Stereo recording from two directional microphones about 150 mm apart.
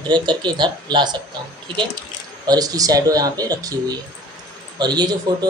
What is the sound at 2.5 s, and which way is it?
Speech, 25° right (ahead or behind).